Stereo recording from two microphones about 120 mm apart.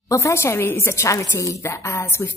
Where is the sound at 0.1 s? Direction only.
25° left (ahead or behind).